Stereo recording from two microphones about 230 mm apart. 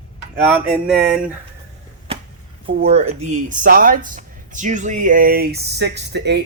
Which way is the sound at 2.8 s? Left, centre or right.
Right.